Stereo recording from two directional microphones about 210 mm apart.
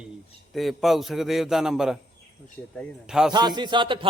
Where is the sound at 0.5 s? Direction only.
Centre (ahead or behind).